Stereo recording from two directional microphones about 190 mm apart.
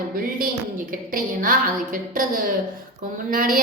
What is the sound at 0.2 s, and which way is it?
A woman's voice, 50° right (ahead or behind).